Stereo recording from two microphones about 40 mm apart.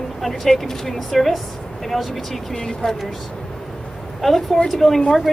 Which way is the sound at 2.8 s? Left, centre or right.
Centre.